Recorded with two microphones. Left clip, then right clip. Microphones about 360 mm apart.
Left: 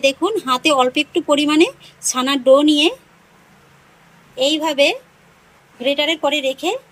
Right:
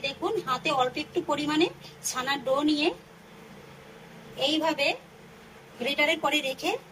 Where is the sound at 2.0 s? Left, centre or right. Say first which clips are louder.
Left 14 dB; left.